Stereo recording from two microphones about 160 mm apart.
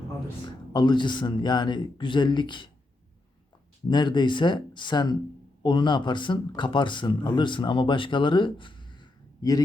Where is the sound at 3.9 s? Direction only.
30° left (ahead or behind).